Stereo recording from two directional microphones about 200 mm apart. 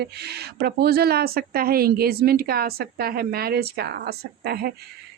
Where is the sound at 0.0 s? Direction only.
55° right (ahead or behind).